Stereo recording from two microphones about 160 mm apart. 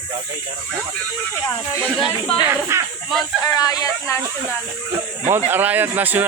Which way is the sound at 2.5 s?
15° right (ahead or behind).